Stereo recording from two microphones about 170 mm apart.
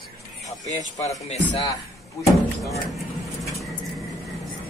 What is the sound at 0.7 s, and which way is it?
Speech, 40° left (ahead or behind).